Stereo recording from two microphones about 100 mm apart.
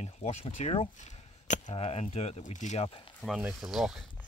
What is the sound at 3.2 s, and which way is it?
Speech, 10° right (ahead or behind).